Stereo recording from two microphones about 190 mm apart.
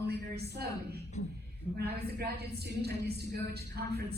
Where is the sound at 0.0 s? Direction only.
60° right (ahead or behind).